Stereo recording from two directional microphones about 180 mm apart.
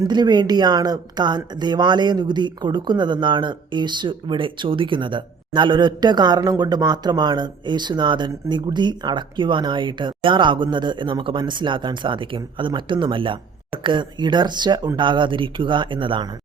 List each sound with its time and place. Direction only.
0.1 s speech: 25° right (ahead or behind)